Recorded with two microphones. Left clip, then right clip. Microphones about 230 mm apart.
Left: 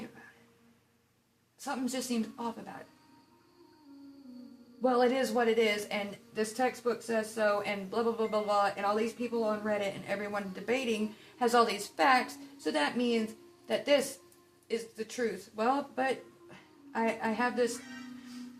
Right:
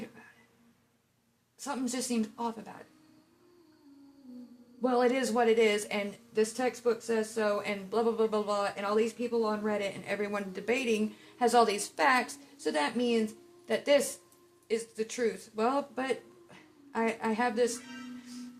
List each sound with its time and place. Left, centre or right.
1.6 s speech: right
4.8 s speech: right